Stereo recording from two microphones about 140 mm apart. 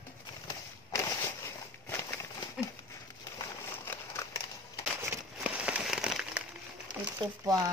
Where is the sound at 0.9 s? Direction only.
20° left (ahead or behind).